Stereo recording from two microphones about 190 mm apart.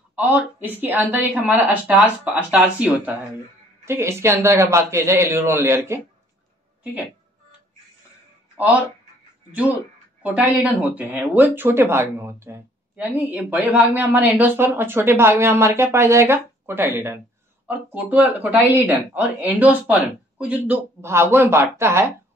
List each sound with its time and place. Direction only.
0.1 s speech: 10° right (ahead or behind)
10.6 s speech: 10° right (ahead or behind)